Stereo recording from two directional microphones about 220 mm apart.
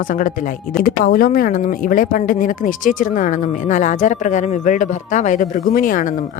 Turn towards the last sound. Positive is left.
turn(degrees=40)  # may be behind; listen again after turning